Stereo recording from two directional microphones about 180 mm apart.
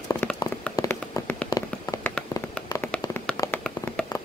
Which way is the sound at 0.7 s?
15° left (ahead or behind).